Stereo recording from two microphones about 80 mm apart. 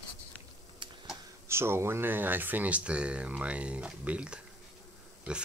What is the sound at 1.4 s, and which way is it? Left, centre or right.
Speech, right.